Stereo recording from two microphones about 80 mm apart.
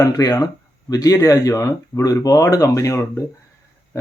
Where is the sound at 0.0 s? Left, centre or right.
Left.